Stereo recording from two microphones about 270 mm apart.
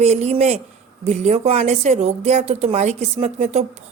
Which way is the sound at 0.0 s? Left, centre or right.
Right.